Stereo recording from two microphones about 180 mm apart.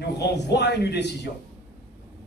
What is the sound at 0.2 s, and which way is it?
A man's voice, 70° left (ahead or behind).